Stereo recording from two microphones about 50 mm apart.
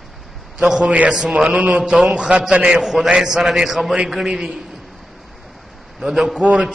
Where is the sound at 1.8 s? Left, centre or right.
Centre.